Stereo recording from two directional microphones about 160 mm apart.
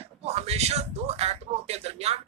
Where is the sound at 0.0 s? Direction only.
40° right (ahead or behind).